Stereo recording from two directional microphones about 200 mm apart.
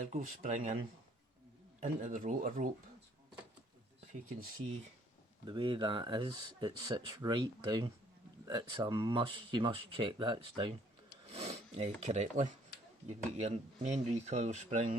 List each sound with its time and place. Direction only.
0.1 s speech: 40° right (ahead or behind)
1.8 s speech: 40° right (ahead or behind)
5.5 s speech: 25° right (ahead or behind)
11.3 s a sound: 30° right (ahead or behind)
12.0 s speech: 35° right (ahead or behind)